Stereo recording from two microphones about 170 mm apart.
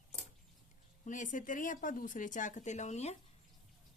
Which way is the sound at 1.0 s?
50° left (ahead or behind).